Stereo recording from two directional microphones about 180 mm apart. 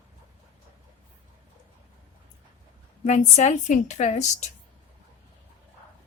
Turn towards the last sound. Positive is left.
turn(degrees=40)  # may be behind; listen again after turning